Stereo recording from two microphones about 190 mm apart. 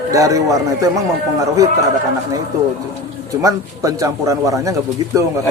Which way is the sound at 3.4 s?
20° right (ahead or behind).